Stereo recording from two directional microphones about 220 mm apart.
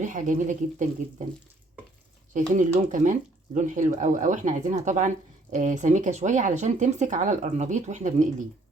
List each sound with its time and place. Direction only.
0.0 s speech: 35° right (ahead or behind)
2.6 s speech: 35° right (ahead or behind)